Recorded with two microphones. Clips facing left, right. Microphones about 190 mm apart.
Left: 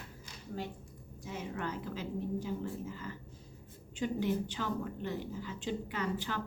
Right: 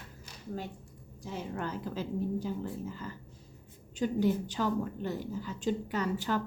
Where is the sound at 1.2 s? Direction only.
35° right (ahead or behind).